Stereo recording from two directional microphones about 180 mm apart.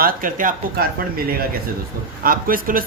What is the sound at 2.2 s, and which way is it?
Speech, 50° right (ahead or behind).